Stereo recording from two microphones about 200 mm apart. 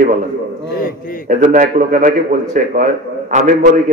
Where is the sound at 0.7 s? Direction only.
45° left (ahead or behind).